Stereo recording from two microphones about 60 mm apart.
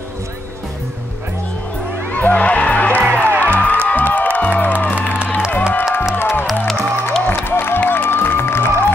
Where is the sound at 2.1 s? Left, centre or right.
Left.